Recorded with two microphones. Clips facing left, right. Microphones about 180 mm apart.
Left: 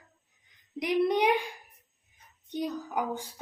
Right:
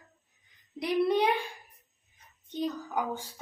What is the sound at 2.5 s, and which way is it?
Speech, 15° left (ahead or behind).